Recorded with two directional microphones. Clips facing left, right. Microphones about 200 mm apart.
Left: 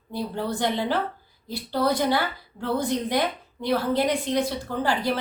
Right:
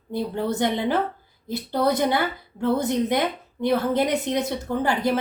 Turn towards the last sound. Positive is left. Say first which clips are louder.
# right 3 dB
turn(degrees=-20)  # may be behind; listen again after turning